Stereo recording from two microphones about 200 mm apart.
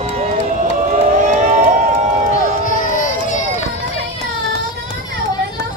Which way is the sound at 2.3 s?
40° left (ahead or behind).